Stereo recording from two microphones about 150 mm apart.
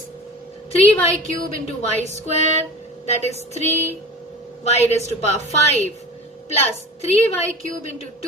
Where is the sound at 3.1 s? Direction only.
45° left (ahead or behind).